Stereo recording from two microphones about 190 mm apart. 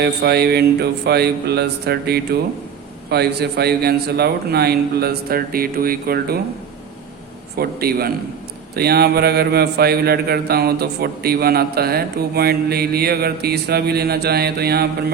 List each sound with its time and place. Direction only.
0.0 s a man's voice: 60° right (ahead or behind)
7.5 s a man's voice: 55° right (ahead or behind)